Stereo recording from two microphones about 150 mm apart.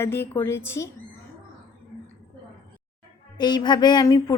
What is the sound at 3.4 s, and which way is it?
Speech, 30° left (ahead or behind).